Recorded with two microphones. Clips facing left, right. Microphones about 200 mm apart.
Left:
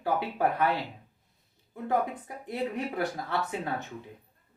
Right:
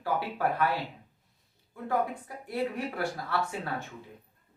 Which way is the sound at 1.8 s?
20° left (ahead or behind).